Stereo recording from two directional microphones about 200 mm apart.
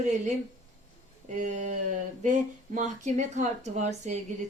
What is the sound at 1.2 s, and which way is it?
Speech, 35° right (ahead or behind).